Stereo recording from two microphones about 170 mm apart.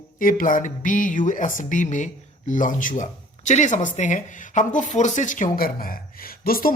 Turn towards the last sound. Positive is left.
turn(degrees=60)  # may be behind; listen again after turning